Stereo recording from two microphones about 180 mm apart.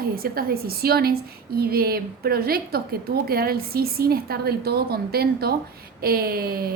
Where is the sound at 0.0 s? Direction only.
55° right (ahead or behind).